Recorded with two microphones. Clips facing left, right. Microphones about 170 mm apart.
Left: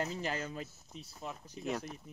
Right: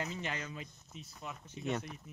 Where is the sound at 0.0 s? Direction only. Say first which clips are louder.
Left 3 dB; 35° left (ahead or behind).